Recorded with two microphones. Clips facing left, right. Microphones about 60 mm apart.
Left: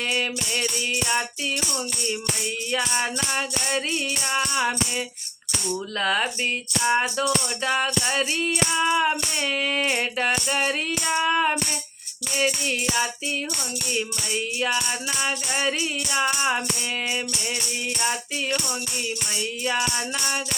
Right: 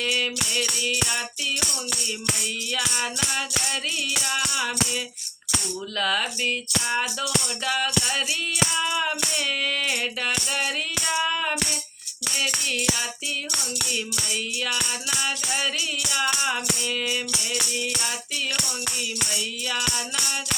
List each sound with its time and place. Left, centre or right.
0.1 s music: left
2.7 s music: left
6.0 s music: left
13.9 s music: left